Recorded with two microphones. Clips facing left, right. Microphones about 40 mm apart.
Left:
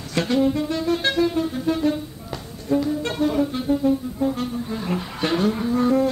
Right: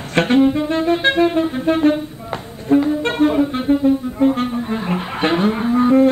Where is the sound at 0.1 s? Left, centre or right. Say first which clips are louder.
Right 7 dB; right.